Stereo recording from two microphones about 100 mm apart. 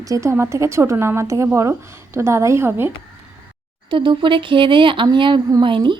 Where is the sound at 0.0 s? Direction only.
30° right (ahead or behind).